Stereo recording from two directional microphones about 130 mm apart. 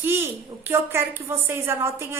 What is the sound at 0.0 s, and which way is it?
Speech, 15° right (ahead or behind).